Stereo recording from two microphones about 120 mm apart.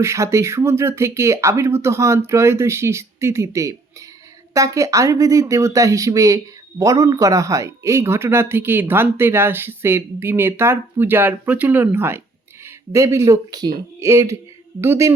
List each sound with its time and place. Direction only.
0.0 s speech: 25° right (ahead or behind)